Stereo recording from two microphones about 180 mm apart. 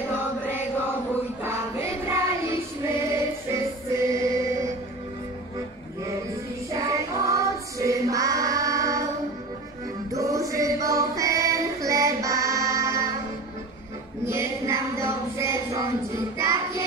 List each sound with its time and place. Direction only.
1.4 s child singing: 15° right (ahead or behind)
4.0 s music: 15° right (ahead or behind)
6.7 s child singing: 20° right (ahead or behind)
10.1 s music: 20° right (ahead or behind)
14.2 s a sound: 15° right (ahead or behind)
16.3 s music: 15° right (ahead or behind)